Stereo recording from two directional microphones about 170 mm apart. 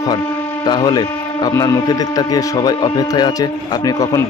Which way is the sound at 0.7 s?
25° left (ahead or behind).